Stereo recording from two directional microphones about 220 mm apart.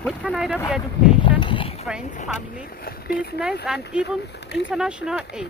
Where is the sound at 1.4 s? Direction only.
25° left (ahead or behind).